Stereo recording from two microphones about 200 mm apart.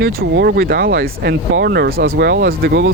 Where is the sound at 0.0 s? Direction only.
50° right (ahead or behind).